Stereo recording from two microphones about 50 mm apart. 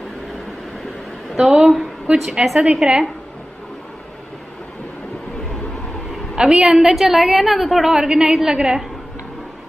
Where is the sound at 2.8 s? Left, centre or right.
Centre.